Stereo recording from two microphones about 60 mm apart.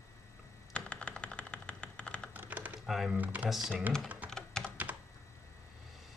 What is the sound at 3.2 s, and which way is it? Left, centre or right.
Speech, right.